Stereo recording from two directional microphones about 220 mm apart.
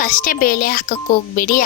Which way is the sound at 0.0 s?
40° left (ahead or behind).